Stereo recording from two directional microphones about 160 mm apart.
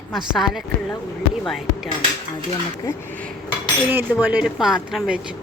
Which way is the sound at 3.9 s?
10° right (ahead or behind).